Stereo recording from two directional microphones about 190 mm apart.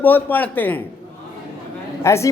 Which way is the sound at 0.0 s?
10° left (ahead or behind).